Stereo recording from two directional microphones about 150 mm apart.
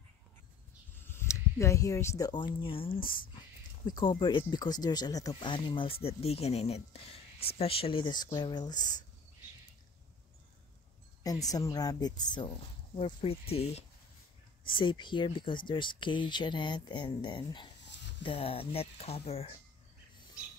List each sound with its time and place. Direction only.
1.0 s speech: 20° left (ahead or behind); by 3.0 s 35° left (ahead or behind)
3.0 s speech: 70° left (ahead or behind)
3.8 s speech: 30° left (ahead or behind)
11.2 s speech: 25° left (ahead or behind); by 19.5 s 40° left (ahead or behind)